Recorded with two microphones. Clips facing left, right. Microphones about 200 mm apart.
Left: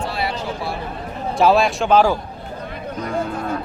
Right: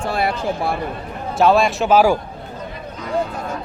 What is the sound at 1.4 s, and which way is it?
Speech, centre (ahead or behind).